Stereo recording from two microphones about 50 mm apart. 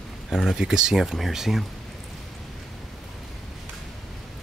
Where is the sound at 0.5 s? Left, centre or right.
Centre.